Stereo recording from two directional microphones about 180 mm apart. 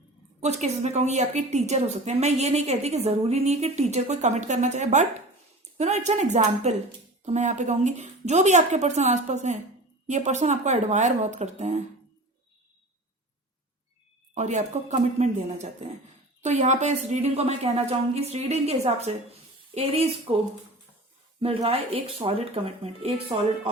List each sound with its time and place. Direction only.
0.3 s a woman's voice: 40° right (ahead or behind)
14.3 s a woman's voice: 40° right (ahead or behind)
21.4 s a woman's voice: 30° right (ahead or behind)